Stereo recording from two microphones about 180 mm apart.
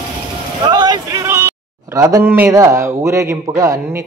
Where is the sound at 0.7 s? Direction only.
20° right (ahead or behind).